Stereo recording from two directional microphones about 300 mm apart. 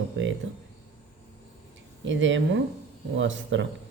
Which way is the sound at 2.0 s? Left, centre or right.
Right.